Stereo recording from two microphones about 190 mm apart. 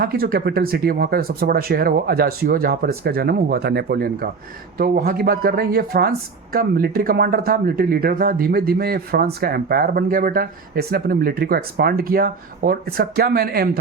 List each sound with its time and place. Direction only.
0.0 s speech: 50° right (ahead or behind)